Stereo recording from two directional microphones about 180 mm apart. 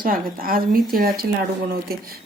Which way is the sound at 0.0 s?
55° right (ahead or behind).